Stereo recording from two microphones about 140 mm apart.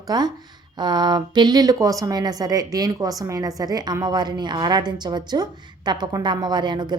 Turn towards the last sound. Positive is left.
turn(degrees=-30)  # may be behind; listen again after turning